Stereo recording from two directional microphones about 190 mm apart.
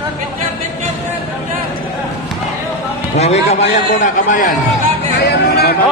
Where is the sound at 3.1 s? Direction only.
35° left (ahead or behind).